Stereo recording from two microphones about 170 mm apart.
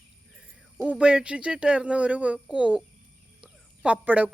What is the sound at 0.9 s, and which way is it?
Speech, 5° right (ahead or behind).